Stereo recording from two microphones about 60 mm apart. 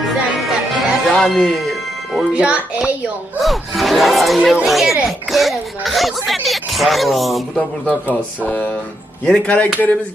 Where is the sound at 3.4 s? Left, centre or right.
Centre.